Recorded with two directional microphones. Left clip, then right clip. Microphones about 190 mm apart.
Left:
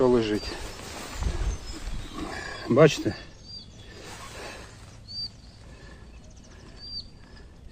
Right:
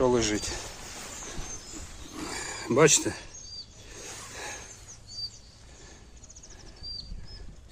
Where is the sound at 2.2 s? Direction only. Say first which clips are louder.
Left 2 dB; 20° right (ahead or behind).